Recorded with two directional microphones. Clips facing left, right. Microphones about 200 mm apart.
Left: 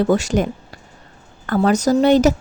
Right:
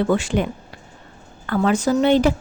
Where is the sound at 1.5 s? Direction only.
40° left (ahead or behind).